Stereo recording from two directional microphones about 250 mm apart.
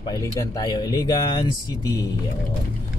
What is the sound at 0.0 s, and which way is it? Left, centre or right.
Speech, centre.